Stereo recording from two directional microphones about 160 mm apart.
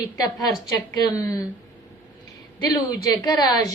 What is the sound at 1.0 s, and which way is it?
Speech, 20° left (ahead or behind).